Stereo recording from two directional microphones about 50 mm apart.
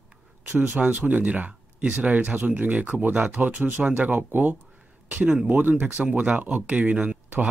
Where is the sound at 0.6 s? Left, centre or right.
Right.